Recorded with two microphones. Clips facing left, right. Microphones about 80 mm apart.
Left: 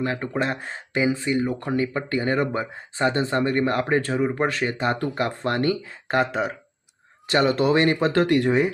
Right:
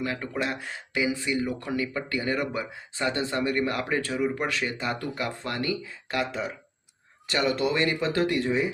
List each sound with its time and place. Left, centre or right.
0.0 s speech: left
7.3 s speech: left